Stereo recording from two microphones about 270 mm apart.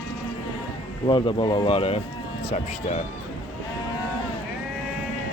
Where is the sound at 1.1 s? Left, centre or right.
Centre.